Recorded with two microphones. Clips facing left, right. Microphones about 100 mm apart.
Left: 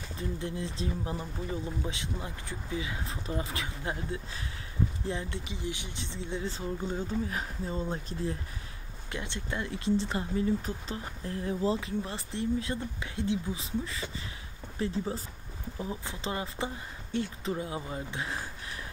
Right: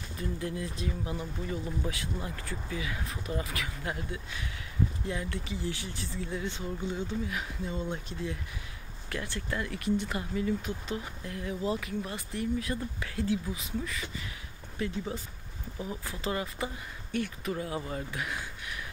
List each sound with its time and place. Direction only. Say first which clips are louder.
0.2 s speech: even; 25° left (ahead or behind)
9.1 s speech: right 1 dB; 20° left (ahead or behind)